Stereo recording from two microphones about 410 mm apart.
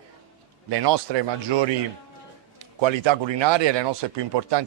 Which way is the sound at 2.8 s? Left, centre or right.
Right.